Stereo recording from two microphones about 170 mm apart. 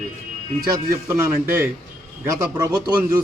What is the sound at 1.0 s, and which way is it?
A man's voice, 10° right (ahead or behind).